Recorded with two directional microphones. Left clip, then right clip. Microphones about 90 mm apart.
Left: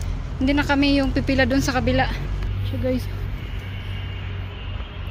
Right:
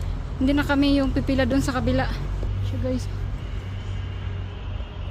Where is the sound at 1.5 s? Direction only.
10° right (ahead or behind).